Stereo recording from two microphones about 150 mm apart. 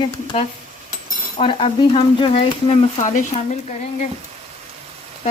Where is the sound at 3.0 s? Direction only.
55° left (ahead or behind).